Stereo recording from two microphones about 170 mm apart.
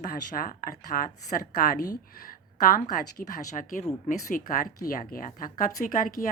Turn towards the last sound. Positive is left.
turn(degrees=55)  # may be behind; listen again after turning